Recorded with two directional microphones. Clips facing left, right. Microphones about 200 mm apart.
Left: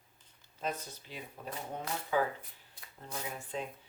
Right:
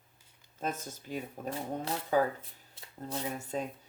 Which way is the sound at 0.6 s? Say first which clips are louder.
Right 2 dB; 45° right (ahead or behind).